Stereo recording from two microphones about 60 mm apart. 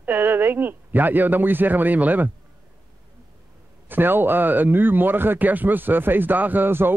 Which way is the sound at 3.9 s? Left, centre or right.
Right.